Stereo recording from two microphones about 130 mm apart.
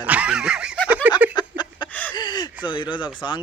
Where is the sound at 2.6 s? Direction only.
35° left (ahead or behind).